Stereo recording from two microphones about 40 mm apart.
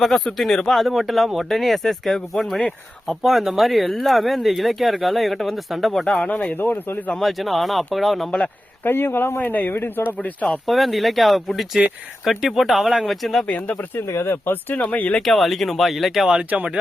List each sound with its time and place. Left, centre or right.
0.3 s speech: centre
3.2 s speech: centre
6.2 s speech: left
6.6 s speech: left
7.2 s speech: centre
8.8 s speech: left
9.4 s speech: left
10.7 s speech: centre
13.9 s speech: left
14.7 s speech: left
15.2 s speech: centre
16.3 s speech: right